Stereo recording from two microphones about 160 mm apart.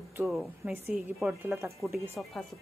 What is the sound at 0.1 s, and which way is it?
Speech, 5° right (ahead or behind).